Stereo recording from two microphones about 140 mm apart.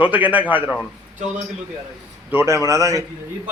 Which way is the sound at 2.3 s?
20° right (ahead or behind).